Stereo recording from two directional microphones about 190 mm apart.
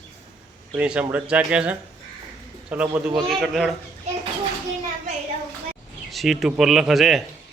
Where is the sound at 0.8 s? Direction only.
5° right (ahead or behind).